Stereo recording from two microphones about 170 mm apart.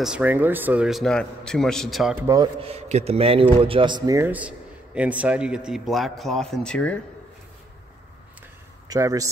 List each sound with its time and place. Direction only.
0.0 s a man's voice: 5° right (ahead or behind)
2.2 s a man's voice: 20° right (ahead or behind)
2.6 s a man's voice: 35° right (ahead or behind); by 7.0 s 5° left (ahead or behind)
8.8 s speech: 20° right (ahead or behind)